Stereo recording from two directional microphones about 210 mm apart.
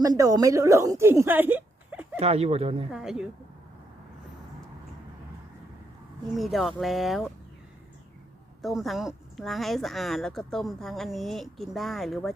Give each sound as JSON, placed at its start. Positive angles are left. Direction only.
{"t": 0.0, "sound": "a woman's voice", "side_deg": -15}
{"t": 2.1, "sound": "speech", "side_deg": -30}
{"t": 2.9, "sound": "speech", "side_deg": -5}
{"t": 6.3, "sound": "speech", "side_deg": 0}
{"t": 8.6, "sound": "speech", "side_deg": 0}